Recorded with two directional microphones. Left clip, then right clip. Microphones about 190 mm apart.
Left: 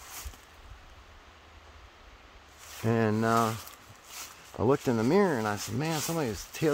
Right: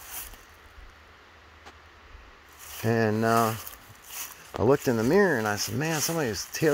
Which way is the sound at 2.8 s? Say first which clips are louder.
Right 3 dB; centre (ahead or behind).